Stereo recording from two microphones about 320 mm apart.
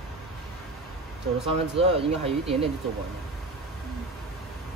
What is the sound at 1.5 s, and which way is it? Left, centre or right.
Speech, centre.